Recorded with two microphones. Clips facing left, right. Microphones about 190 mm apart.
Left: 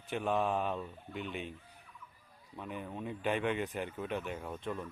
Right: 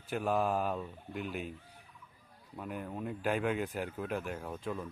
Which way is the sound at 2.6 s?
5° right (ahead or behind).